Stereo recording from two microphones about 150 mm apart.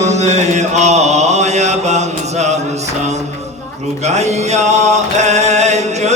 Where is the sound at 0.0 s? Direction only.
50° right (ahead or behind).